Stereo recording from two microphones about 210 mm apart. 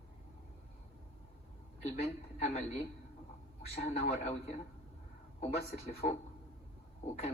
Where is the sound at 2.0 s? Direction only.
30° left (ahead or behind).